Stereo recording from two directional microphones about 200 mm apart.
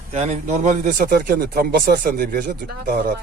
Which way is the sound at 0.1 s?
35° right (ahead or behind).